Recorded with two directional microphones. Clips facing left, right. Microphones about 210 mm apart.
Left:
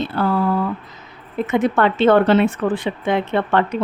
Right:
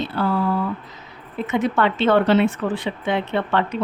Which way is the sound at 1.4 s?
50° left (ahead or behind).